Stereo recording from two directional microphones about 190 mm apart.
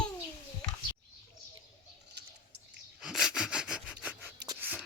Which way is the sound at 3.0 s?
Centre (ahead or behind).